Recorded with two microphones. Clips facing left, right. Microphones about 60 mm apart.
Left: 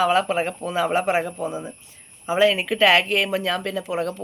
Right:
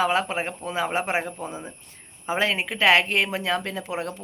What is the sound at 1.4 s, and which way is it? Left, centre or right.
Speech, centre.